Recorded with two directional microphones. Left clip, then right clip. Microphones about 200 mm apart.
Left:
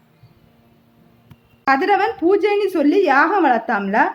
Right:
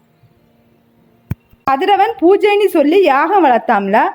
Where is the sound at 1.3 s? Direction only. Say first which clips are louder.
Right 2 dB; 25° right (ahead or behind).